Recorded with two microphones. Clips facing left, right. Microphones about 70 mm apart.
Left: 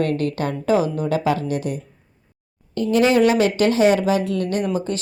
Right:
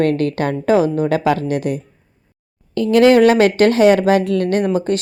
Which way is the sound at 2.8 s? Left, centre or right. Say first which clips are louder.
Right 6 dB; right.